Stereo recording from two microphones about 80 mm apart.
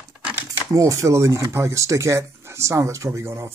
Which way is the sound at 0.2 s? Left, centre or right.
Centre.